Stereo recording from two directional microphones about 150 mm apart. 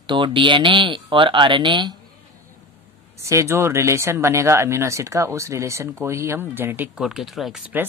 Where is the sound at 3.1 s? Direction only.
20° right (ahead or behind).